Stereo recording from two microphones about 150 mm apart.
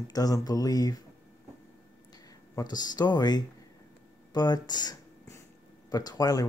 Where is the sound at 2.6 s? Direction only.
25° left (ahead or behind).